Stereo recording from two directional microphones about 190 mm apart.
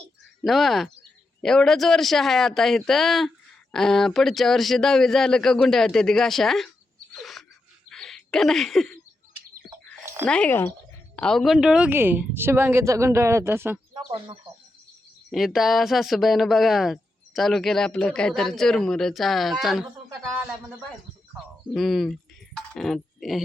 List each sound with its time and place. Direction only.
0.4 s speech: centre (ahead or behind)
7.1 s a sound: centre (ahead or behind)
7.9 s bird: 5° left (ahead or behind)
10.2 s a woman's voice: 5° left (ahead or behind); by 13.7 s 10° right (ahead or behind)
13.9 s speech: 25° right (ahead or behind)
15.3 s speech: centre (ahead or behind)
21.7 s speech: centre (ahead or behind)